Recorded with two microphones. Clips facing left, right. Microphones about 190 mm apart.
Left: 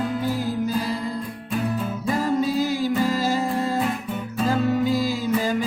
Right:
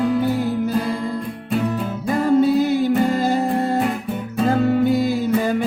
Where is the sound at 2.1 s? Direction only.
60° right (ahead or behind).